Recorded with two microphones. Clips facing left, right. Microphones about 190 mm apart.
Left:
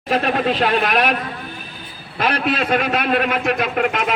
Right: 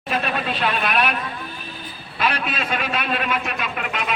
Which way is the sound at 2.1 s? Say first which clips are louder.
Left 5 dB; 50° left (ahead or behind).